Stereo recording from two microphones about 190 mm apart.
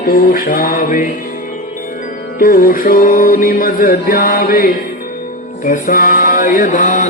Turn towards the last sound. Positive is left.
turn(degrees=45)  # may be behind; listen again after turning